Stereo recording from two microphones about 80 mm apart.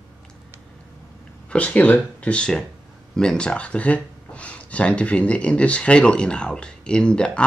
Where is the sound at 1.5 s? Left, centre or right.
Centre.